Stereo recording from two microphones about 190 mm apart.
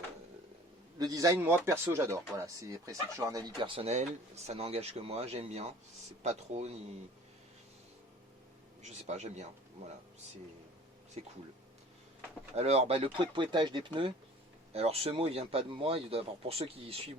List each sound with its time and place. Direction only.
0.9 s a man's voice: 20° right (ahead or behind); by 6.9 s 35° right (ahead or behind)
8.8 s speech: 35° right (ahead or behind)
11.2 s speech: 35° right (ahead or behind)
12.5 s speech: 35° right (ahead or behind)